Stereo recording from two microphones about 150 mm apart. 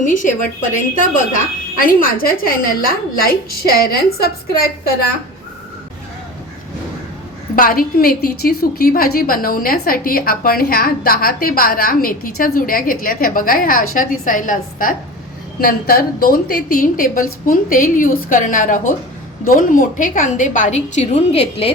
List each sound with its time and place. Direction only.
0.0 s a woman's voice: 60° left (ahead or behind); by 4.9 s 90° left
7.5 s a woman's voice: 70° left (ahead or behind)
15.6 s a woman's voice: 80° left; by 21.7 s 45° left (ahead or behind)